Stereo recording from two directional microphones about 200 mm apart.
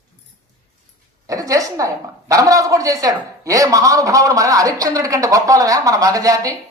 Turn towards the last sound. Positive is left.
turn(degrees=-15)  # may be behind; listen again after turning